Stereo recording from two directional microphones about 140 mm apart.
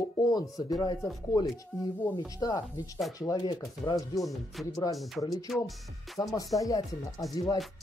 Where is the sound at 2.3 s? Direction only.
25° left (ahead or behind).